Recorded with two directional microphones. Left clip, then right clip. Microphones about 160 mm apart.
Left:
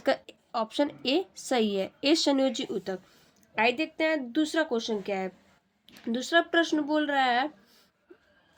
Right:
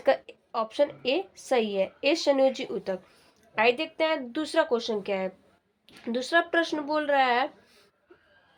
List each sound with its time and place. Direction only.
0.0 s a woman's voice: 40° left (ahead or behind)